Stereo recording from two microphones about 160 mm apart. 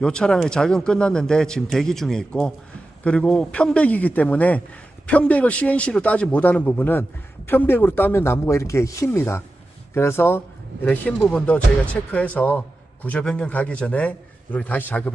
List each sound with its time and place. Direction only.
0.0 s speech: 5° left (ahead or behind)